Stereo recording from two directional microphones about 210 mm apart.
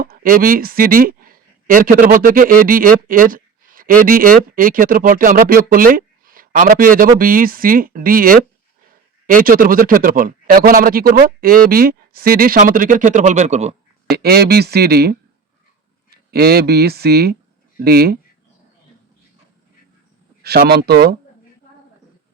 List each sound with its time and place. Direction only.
0.0 s a man's voice: 45° right (ahead or behind)
14.1 s speech: 50° right (ahead or behind)
20.4 s speech: 50° right (ahead or behind)